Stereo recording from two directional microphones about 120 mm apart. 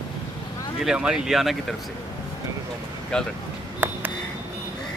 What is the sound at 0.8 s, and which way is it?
Speech, 5° right (ahead or behind).